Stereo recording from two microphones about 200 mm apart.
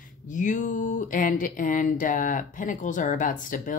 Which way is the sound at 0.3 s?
40° left (ahead or behind).